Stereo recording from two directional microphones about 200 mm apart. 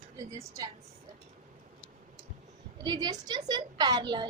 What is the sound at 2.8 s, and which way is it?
A woman's voice, 20° right (ahead or behind).